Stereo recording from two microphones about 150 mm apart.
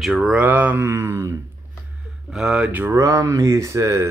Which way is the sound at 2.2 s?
5° right (ahead or behind).